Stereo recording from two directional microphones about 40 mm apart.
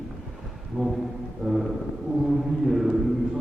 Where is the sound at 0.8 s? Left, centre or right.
Right.